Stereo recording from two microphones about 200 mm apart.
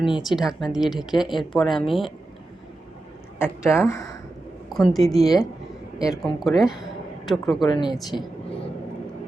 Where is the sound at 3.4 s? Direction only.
15° left (ahead or behind).